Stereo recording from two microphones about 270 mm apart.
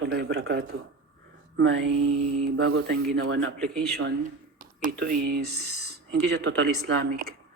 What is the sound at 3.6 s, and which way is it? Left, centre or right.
Speech, centre.